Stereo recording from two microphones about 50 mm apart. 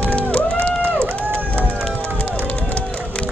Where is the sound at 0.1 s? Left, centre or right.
Left.